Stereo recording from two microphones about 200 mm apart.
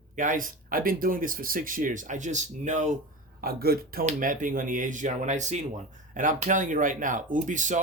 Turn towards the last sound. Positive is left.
turn(degrees=-40)  # may be behind; listen again after turning